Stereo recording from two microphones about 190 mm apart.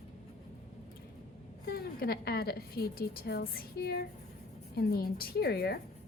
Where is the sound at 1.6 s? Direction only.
55° left (ahead or behind).